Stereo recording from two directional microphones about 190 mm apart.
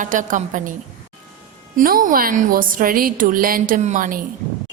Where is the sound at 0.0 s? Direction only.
45° right (ahead or behind).